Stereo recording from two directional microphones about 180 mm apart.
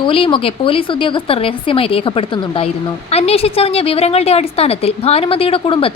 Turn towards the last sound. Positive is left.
turn(degrees=30)  # may be behind; listen again after turning